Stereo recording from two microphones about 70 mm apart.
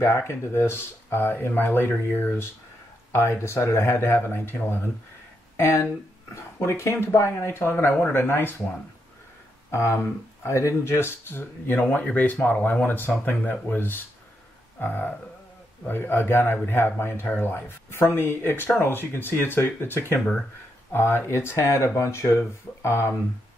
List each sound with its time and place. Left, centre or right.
0.0 s speech: left
9.7 s speech: left
11.8 s speech: left